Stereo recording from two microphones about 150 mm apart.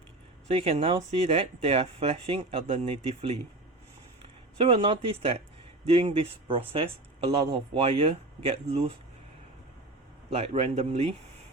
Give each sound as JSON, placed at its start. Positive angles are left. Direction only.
{"t": 0.4, "sound": "a man's voice", "side_deg": -45}
{"t": 4.5, "sound": "speech", "side_deg": -35}
{"t": 10.2, "sound": "a man's voice", "side_deg": -40}